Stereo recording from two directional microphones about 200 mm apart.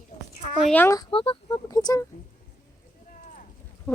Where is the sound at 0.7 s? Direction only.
10° left (ahead or behind).